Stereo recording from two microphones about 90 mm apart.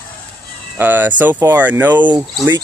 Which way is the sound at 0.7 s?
20° right (ahead or behind).